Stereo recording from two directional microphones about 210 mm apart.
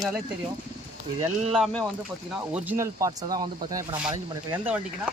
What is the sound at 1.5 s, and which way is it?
Speech, centre (ahead or behind).